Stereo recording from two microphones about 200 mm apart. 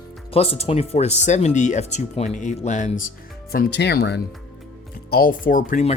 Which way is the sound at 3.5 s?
55° left (ahead or behind).